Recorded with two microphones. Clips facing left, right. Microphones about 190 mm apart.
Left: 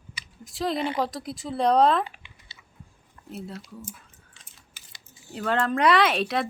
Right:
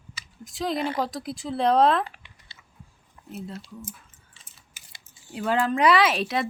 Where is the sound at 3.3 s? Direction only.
Centre (ahead or behind).